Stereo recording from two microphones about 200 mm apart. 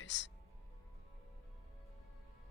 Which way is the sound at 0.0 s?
65° left (ahead or behind).